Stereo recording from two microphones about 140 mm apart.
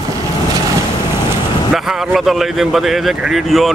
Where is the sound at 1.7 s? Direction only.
Centre (ahead or behind).